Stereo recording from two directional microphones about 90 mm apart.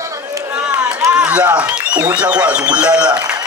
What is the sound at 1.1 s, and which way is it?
A man's voice, 15° right (ahead or behind).